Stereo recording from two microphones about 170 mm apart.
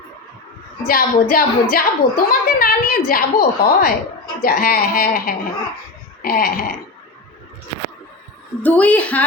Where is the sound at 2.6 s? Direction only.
55° left (ahead or behind).